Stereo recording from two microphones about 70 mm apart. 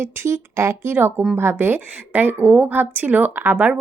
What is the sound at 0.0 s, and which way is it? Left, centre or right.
A woman's voice, right.